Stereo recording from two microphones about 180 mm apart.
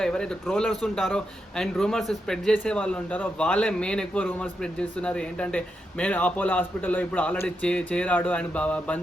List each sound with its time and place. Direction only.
0.0 s a man's voice: 5° left (ahead or behind)